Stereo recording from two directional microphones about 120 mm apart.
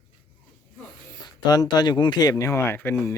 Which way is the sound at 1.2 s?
35° left (ahead or behind).